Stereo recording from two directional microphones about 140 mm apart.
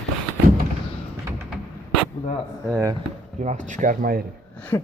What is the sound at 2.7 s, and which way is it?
Speech, 25° right (ahead or behind).